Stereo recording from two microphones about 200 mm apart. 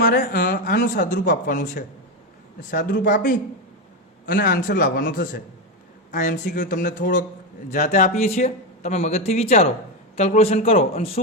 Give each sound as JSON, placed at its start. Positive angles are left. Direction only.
{"t": 0.0, "sound": "a woman's voice", "side_deg": 45}